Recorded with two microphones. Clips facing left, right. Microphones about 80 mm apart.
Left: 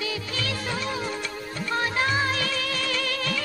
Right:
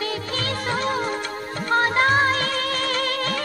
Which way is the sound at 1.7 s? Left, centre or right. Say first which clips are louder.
Right 7 dB; right.